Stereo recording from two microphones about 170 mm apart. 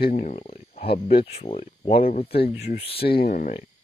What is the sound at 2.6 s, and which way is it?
Speech, 35° left (ahead or behind).